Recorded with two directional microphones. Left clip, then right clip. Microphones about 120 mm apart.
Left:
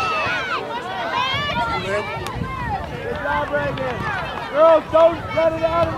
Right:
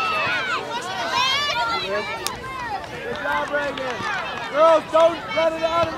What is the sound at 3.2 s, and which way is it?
Run, 35° right (ahead or behind).